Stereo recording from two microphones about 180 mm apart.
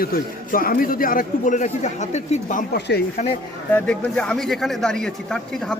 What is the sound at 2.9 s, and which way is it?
Speech, 70° left (ahead or behind).